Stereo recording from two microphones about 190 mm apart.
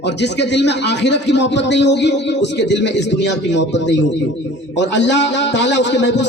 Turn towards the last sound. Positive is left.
turn(degrees=70)  # may be behind; listen again after turning